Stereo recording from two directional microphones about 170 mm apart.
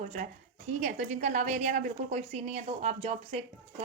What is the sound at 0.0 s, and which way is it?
A woman's voice, 45° right (ahead or behind).